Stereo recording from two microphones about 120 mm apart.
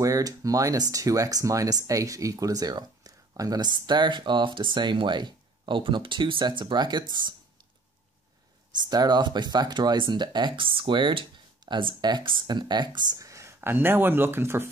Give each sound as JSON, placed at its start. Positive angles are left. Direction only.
{"t": 0.0, "sound": "speech", "side_deg": -30}
{"t": 8.7, "sound": "speech", "side_deg": -35}